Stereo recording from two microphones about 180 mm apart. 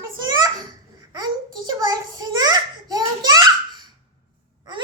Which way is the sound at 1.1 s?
20° right (ahead or behind).